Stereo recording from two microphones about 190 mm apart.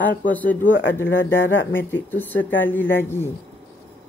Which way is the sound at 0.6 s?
80° left.